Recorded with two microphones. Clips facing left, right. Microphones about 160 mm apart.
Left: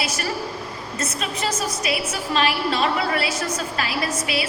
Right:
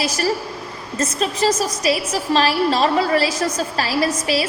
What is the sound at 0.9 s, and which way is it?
A woman's voice, 35° right (ahead or behind).